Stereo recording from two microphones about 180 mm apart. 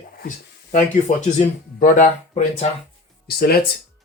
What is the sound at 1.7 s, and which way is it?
Speech, 50° left (ahead or behind).